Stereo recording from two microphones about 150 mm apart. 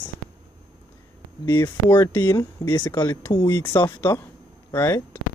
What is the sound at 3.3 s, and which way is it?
Speech, 30° left (ahead or behind).